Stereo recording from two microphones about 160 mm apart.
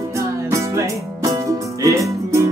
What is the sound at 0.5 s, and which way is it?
Music, 20° right (ahead or behind).